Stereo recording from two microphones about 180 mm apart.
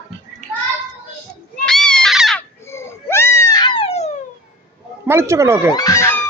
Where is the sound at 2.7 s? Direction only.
15° left (ahead or behind); by 4.1 s 35° left (ahead or behind).